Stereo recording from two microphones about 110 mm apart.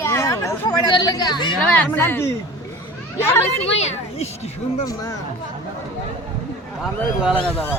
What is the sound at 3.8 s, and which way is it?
Speech, 80° left.